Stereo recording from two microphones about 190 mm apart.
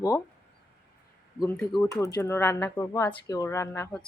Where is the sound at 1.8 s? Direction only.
15° left (ahead or behind).